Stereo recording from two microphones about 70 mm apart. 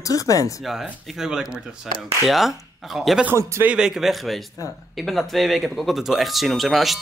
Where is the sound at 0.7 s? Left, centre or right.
Centre.